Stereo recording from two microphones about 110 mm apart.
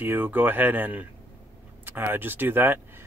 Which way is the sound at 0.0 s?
15° right (ahead or behind).